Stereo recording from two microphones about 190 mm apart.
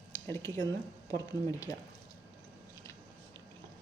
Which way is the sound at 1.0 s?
20° left (ahead or behind).